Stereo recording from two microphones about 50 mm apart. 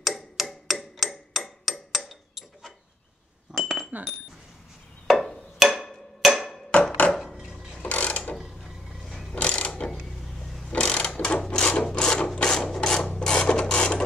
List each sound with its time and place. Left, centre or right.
0.0 s hammer: centre
3.5 s cutlery: centre
5.0 s a sound: centre
7.8 s mechanisms: left
8.4 s a sound: centre
9.3 s mechanisms: left
9.9 s a sound: centre
10.7 s mechanisms: centre
11.1 s sewing machine: left
11.4 s wood: centre
12.4 s rub: centre
13.1 s printer: centre